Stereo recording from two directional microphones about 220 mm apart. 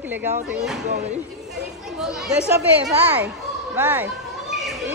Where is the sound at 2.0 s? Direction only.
Centre (ahead or behind).